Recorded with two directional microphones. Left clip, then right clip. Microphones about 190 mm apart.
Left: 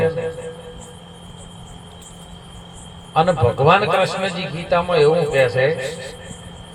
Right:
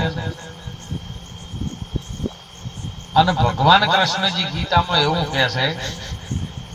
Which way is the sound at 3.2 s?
15° left (ahead or behind).